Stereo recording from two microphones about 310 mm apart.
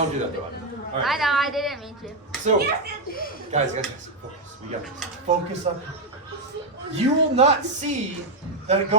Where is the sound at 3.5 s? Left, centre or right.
Right.